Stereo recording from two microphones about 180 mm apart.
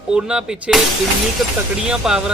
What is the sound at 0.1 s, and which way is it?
Speech, 5° right (ahead or behind).